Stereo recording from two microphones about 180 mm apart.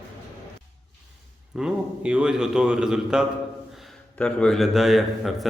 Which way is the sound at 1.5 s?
5° right (ahead or behind).